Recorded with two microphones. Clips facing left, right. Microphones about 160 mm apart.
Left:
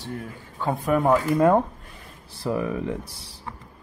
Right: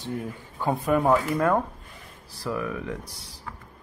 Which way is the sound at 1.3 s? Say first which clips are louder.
Left 5 dB; 20° left (ahead or behind).